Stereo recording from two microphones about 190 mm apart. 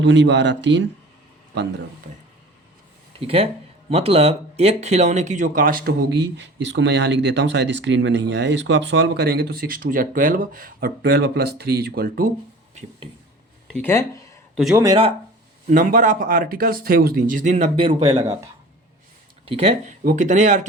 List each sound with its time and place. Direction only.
0.0 s speech: 70° right (ahead or behind)
3.2 s speech: 30° right (ahead or behind); by 12.3 s 50° right (ahead or behind)
13.7 s speech: 15° left (ahead or behind)
15.6 s speech: 45° right (ahead or behind)
17.7 s speech: 25° right (ahead or behind)
19.5 s speech: 30° right (ahead or behind)